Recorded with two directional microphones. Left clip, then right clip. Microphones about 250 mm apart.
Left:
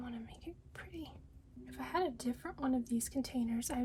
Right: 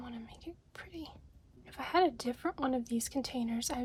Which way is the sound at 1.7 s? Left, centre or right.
Right.